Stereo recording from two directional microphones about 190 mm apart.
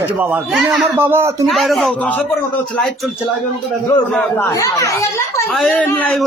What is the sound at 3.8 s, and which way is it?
A man's voice, 10° left (ahead or behind).